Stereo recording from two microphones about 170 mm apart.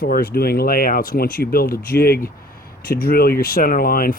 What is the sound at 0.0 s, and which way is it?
Speech, 60° left (ahead or behind).